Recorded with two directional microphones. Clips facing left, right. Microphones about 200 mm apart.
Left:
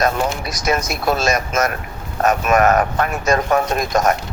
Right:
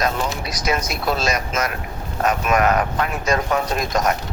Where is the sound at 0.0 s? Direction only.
45° left (ahead or behind).